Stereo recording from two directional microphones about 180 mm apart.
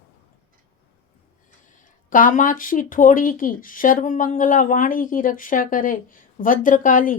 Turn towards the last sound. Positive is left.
turn(degrees=50)  # may be behind; listen again after turning